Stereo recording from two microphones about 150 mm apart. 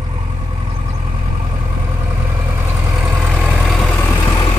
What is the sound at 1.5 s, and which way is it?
Vehicle, 20° right (ahead or behind).